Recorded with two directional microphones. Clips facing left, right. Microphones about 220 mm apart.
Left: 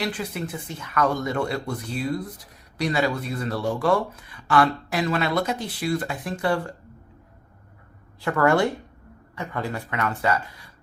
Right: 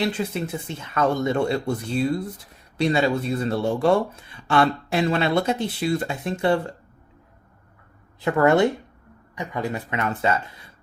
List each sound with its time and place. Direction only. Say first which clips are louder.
0.0 s speech: right 4 dB; 25° right (ahead or behind)
8.2 s speech: right 3 dB; 20° right (ahead or behind)